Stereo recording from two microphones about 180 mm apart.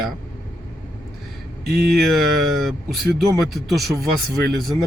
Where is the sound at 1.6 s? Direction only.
60° right (ahead or behind).